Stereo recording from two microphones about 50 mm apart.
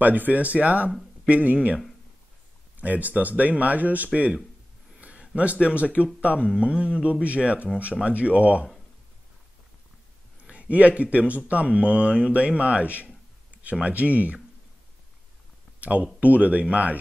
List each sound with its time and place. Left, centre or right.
0.0 s speech: right
2.8 s speech: right
10.4 s speech: right
15.8 s speech: right